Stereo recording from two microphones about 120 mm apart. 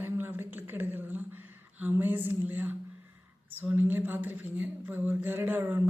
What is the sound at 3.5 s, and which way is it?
Mantra, 15° right (ahead or behind).